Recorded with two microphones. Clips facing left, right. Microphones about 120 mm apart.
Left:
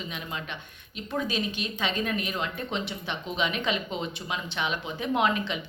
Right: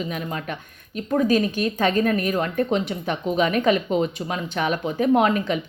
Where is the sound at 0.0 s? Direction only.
45° right (ahead or behind).